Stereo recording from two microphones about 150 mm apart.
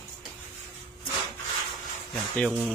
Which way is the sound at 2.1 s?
Centre (ahead or behind).